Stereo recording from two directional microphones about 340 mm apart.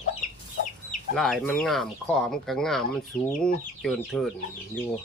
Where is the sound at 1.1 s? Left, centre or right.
Centre.